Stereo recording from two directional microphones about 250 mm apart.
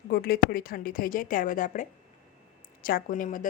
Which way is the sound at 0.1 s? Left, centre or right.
Left.